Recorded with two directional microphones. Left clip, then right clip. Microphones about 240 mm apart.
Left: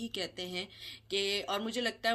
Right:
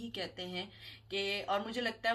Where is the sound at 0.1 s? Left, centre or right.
Left.